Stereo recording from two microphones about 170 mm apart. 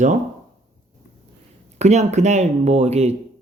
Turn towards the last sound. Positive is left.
turn(degrees=-40)  # may be behind; listen again after turning